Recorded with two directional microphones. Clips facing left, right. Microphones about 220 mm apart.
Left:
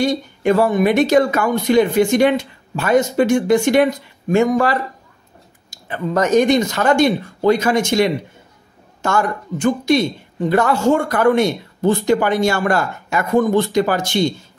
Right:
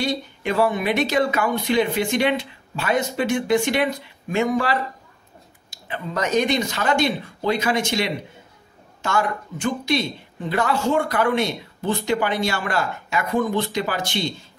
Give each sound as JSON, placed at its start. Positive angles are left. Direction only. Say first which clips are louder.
{"t": 0.0, "sound": "speech", "louder": "left 7 dB", "side_deg": 45}